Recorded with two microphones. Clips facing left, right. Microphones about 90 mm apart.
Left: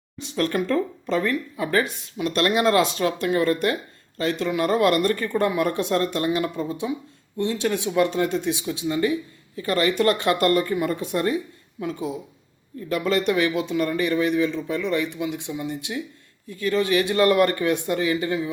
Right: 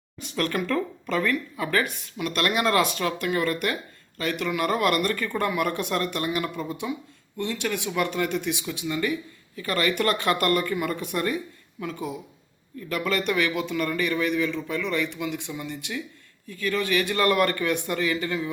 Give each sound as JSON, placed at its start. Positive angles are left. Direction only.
{"t": 0.2, "sound": "speech", "side_deg": 30}